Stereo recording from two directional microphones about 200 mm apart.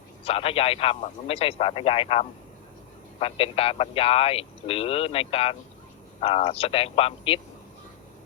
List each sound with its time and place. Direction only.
0.3 s speech: 30° left (ahead or behind)